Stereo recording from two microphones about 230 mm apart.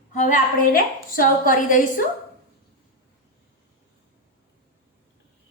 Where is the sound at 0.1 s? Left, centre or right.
Left.